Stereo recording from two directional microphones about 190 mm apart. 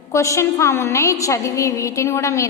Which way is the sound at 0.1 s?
15° left (ahead or behind).